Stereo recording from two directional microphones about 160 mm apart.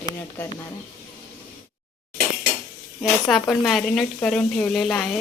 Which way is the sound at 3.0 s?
Centre (ahead or behind).